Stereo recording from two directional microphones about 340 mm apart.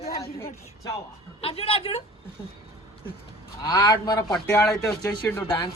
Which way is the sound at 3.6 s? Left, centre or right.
Centre.